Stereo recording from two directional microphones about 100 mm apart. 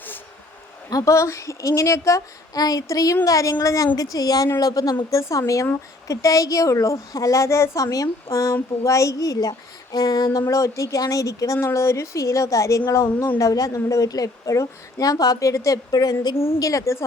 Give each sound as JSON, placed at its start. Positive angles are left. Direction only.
{"t": 0.9, "sound": "a woman's voice", "side_deg": 35}